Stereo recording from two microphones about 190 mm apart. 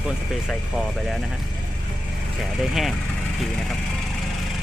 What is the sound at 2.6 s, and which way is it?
Speech, centre (ahead or behind).